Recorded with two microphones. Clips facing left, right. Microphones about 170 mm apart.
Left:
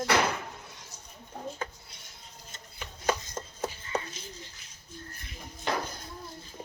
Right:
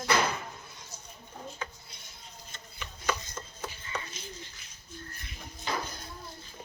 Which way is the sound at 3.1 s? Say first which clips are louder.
Left 3 dB; 40° left (ahead or behind).